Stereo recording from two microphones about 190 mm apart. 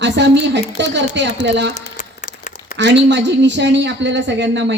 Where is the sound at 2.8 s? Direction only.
65° right (ahead or behind).